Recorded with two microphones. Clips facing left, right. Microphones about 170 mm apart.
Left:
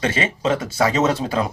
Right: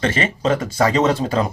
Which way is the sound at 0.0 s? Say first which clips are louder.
Right 1 dB; 5° left (ahead or behind).